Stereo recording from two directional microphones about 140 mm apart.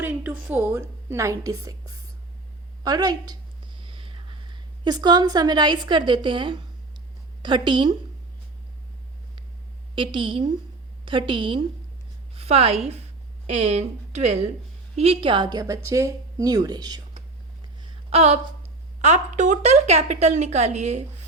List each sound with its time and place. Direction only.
0.0 s a woman's voice: 10° right (ahead or behind); by 3.3 s 25° right (ahead or behind)
3.8 s a woman's voice: 40° right (ahead or behind)
9.9 s a woman's voice: 35° right (ahead or behind)
17.8 s a sound: 45° right (ahead or behind)
19.0 s speech: 55° right (ahead or behind)